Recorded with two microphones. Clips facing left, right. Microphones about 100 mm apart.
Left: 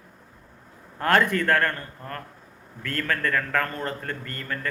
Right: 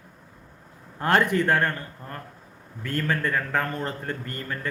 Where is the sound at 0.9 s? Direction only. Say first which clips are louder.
Even; 20° right (ahead or behind).